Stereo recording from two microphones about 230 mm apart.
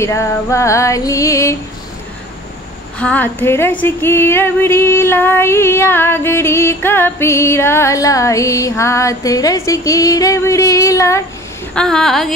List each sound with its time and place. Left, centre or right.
0.0 s female singing: centre
3.0 s female singing: centre
11.7 s speech: centre